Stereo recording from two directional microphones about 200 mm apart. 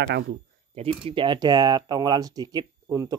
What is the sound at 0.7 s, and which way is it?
Speech, 30° right (ahead or behind).